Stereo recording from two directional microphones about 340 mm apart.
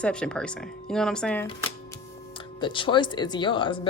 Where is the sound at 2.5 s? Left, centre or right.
Centre.